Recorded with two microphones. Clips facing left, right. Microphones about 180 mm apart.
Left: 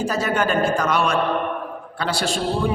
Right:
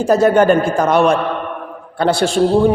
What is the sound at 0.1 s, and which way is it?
A man's voice, 55° right (ahead or behind).